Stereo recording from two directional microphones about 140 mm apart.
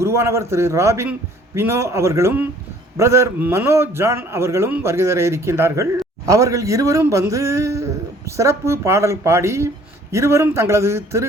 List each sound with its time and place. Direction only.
0.0 s a man's voice: 20° right (ahead or behind)